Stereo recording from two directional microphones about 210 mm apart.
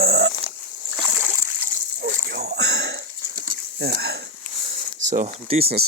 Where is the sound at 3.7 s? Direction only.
50° right (ahead or behind).